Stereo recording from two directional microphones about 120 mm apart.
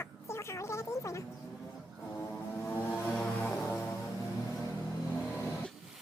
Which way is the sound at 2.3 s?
10° left (ahead or behind).